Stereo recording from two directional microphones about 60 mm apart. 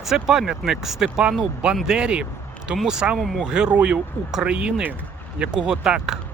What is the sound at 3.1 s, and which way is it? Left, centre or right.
Speech, centre.